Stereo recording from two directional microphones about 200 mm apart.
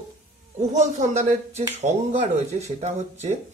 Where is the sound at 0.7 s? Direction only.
35° right (ahead or behind).